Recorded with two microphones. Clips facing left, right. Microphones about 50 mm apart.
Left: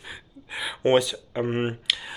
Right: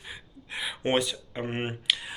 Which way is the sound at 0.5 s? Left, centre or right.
Centre.